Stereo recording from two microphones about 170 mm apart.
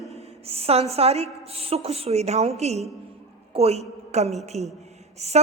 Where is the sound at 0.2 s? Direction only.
35° right (ahead or behind).